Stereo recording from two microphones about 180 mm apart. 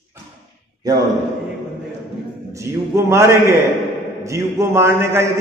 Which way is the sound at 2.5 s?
15° right (ahead or behind).